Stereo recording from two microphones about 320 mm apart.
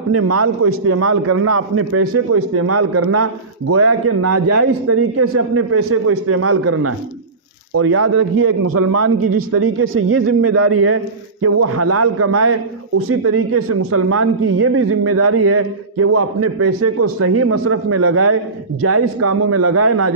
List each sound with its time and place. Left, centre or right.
0.1 s a man's voice: right